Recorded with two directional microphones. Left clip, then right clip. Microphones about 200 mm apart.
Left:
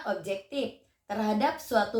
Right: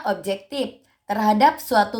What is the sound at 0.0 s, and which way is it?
A woman's voice, 65° right (ahead or behind).